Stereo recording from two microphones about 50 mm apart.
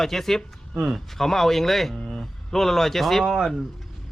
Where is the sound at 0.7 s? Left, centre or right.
Centre.